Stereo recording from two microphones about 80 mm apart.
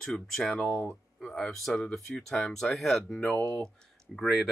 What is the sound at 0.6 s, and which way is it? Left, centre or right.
Speech, centre.